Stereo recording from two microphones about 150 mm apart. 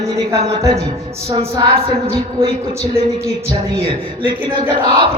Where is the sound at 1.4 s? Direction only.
35° right (ahead or behind).